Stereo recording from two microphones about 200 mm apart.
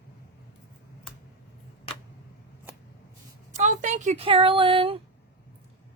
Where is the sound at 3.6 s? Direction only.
35° right (ahead or behind).